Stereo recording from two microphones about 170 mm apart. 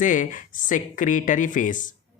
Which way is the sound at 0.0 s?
50° left (ahead or behind).